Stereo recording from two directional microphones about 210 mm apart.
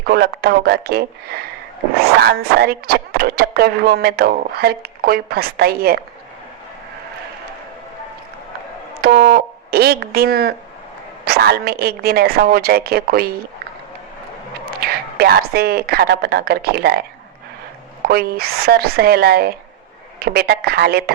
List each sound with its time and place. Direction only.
0.0 s speech: 50° right (ahead or behind)
9.0 s a sound: 45° right (ahead or behind)
11.3 s speech: 50° right (ahead or behind)
14.7 s speech: 45° right (ahead or behind)
18.1 s speech: 45° right (ahead or behind)